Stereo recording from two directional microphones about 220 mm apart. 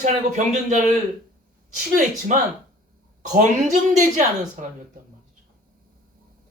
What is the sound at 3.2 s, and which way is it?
A woman's voice, 35° right (ahead or behind).